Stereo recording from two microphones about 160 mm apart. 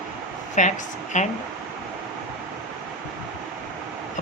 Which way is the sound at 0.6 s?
50° left (ahead or behind).